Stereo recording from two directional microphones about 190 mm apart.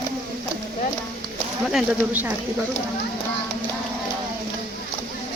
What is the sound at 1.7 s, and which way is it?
Speech, 5° right (ahead or behind).